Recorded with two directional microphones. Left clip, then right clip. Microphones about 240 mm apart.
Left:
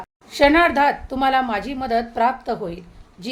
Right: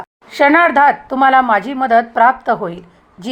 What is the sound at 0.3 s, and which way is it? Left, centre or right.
A woman's voice, centre.